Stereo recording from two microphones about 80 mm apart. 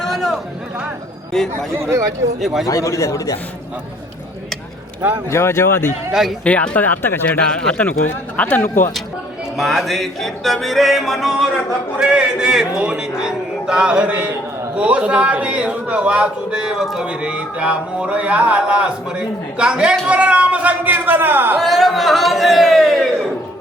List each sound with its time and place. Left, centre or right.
0.0 s a sound: centre
1.7 s speech: right
2.4 s music: centre
2.6 s a man's voice: left
5.3 s a man's voice: left
6.1 s music: centre
6.4 s a man's voice: centre
9.6 s music: centre
14.8 s a man's voice: centre
21.6 s music: centre